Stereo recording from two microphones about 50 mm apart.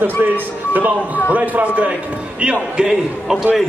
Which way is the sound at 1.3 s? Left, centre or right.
Right.